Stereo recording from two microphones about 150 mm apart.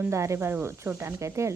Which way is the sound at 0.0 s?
20° right (ahead or behind).